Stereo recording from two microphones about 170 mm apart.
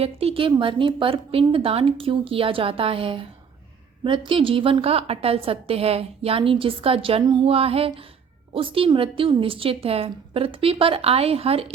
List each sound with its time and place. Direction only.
0.0 s a woman's voice: 35° right (ahead or behind)